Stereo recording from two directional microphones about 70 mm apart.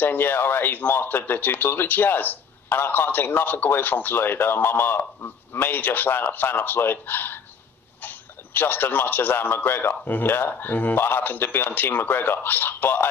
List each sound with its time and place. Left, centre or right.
0.0 s speech: left